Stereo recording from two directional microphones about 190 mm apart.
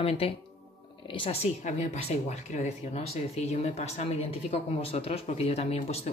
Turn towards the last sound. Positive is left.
turn(degrees=35)  # may be behind; listen again after turning